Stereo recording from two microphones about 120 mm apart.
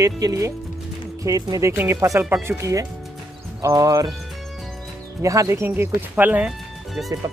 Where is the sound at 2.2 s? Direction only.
15° right (ahead or behind).